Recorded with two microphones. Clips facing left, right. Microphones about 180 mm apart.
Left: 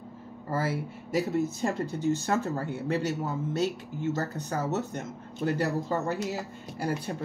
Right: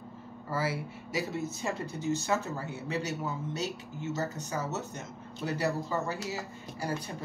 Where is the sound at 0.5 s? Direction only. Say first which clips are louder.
Left 3 dB; 50° left (ahead or behind).